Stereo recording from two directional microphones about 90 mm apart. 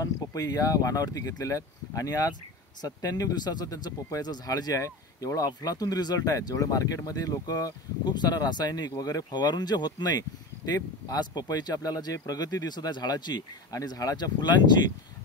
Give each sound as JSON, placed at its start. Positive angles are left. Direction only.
{"t": 0.0, "sound": "speech", "side_deg": 40}